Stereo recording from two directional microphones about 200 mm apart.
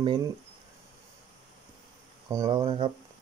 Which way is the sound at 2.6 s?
25° right (ahead or behind).